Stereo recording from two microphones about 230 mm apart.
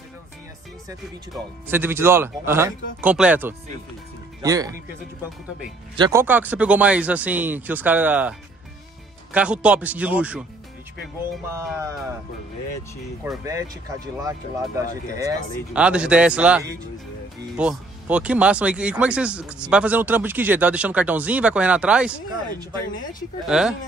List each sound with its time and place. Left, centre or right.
1.3 s speech: centre
5.9 s speech: centre
11.4 s speech: centre
13.2 s speech: centre
23.4 s speech: centre